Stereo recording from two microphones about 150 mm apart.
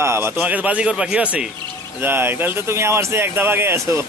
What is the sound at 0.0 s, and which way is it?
A man's voice, 15° right (ahead or behind).